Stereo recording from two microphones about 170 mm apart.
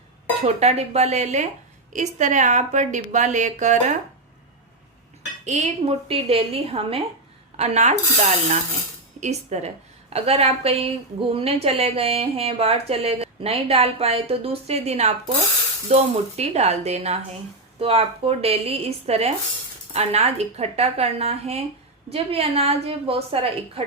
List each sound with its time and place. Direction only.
0.4 s speech: 40° right (ahead or behind)
5.5 s speech: 40° right (ahead or behind)